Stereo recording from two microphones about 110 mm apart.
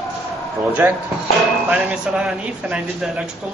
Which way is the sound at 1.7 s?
10° right (ahead or behind).